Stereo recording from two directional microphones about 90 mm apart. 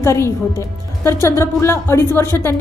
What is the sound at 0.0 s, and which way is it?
A woman's voice, 30° left (ahead or behind).